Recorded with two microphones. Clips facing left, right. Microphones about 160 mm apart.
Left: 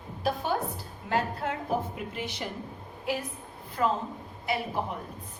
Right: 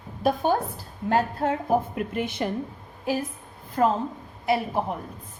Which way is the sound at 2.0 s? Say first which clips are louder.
Right 8 dB; 55° right (ahead or behind).